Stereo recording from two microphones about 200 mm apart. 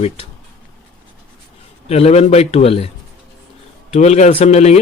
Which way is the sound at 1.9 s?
30° left (ahead or behind).